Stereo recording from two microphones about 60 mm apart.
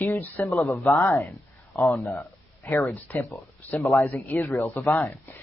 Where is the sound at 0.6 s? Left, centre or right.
Left.